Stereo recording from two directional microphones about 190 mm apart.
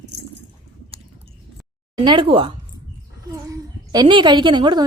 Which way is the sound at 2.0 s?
25° right (ahead or behind).